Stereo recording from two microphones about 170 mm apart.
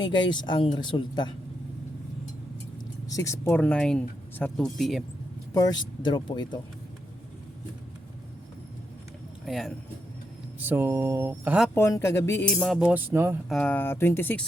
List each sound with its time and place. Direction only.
0.0 s speech: 25° left (ahead or behind)
3.1 s speech: 20° left (ahead or behind); by 5.0 s centre (ahead or behind)
5.5 s speech: 25° left (ahead or behind)
9.5 s speech: centre (ahead or behind)
10.6 s a sound: 10° right (ahead or behind)
11.7 s speech: 15° left (ahead or behind)
12.6 s a sound: 5° right (ahead or behind)
13.5 s speech: 5° left (ahead or behind)